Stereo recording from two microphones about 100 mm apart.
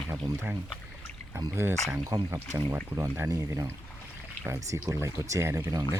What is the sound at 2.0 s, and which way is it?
Speech, 35° right (ahead or behind).